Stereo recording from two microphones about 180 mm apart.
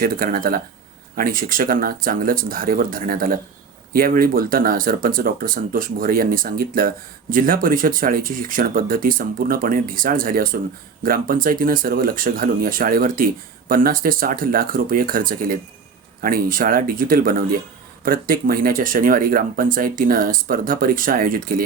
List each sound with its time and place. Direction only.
0.0 s speech: 55° right (ahead or behind)